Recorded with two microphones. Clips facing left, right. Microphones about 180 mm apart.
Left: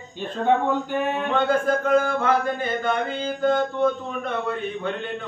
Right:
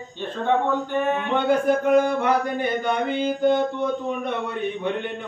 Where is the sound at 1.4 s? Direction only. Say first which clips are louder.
Right 4 dB; 15° right (ahead or behind).